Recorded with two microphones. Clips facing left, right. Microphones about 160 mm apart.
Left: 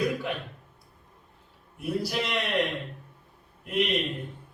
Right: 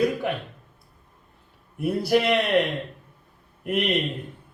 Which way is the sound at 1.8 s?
60° right (ahead or behind).